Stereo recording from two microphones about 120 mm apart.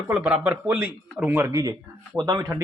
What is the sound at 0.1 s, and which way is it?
A man's voice, 10° right (ahead or behind).